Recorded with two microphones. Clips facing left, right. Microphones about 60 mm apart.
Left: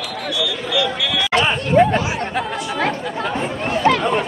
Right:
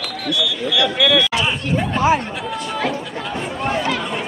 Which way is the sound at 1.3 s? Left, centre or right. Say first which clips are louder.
Left 5 dB; left.